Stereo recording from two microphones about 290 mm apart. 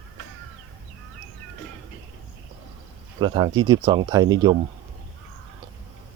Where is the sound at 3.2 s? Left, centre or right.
Centre.